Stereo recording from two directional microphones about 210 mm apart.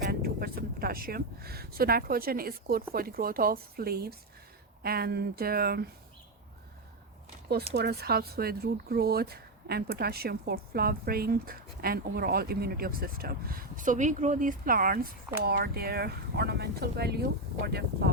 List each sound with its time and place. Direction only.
0.0 s speech: 45° right (ahead or behind)
7.7 s speech: 50° right (ahead or behind)